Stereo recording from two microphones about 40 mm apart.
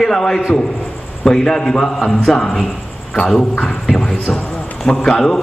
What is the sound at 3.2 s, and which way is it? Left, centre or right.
A man's voice, centre.